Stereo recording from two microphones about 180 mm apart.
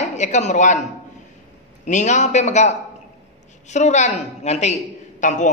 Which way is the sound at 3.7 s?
40° left (ahead or behind).